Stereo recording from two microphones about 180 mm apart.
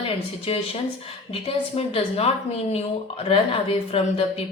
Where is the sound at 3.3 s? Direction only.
30° left (ahead or behind).